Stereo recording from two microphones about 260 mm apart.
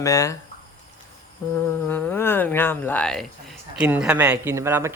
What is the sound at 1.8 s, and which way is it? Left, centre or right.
Speech, centre.